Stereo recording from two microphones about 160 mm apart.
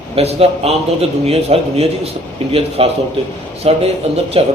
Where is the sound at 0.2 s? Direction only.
40° right (ahead or behind).